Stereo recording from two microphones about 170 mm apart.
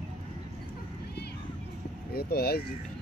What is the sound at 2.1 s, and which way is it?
Speech, 65° left (ahead or behind).